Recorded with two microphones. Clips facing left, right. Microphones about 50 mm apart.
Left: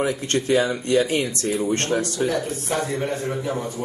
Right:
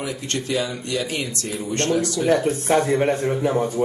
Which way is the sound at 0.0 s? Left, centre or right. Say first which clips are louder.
Left 5 dB; left.